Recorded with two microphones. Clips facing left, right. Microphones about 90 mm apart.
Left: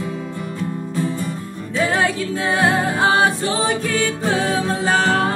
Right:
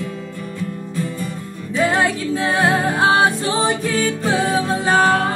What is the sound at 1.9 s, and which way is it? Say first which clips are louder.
Music: right 1 dB; 20° right (ahead or behind).